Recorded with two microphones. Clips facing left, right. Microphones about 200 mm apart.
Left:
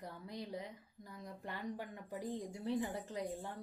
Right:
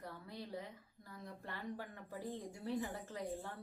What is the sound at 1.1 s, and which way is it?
Speech, 15° left (ahead or behind).